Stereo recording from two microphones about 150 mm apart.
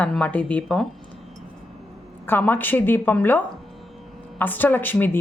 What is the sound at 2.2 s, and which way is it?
A woman's voice, 15° left (ahead or behind).